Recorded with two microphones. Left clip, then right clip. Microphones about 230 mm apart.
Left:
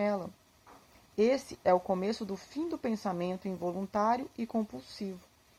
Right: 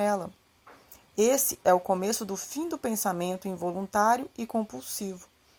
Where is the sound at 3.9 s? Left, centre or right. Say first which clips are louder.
Right 6 dB; right.